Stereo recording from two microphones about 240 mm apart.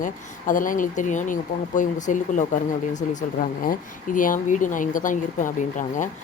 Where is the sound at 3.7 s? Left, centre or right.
Left.